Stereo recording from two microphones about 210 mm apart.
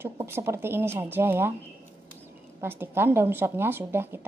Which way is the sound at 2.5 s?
10° right (ahead or behind).